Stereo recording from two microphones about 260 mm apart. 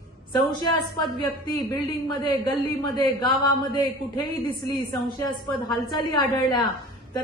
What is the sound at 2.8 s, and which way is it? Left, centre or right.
Speech, centre.